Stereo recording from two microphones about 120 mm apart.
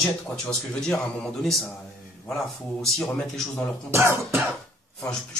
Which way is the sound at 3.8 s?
20° right (ahead or behind).